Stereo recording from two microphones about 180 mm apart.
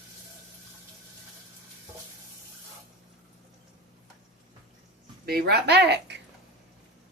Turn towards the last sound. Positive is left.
turn(degrees=-70)  # may be behind; listen again after turning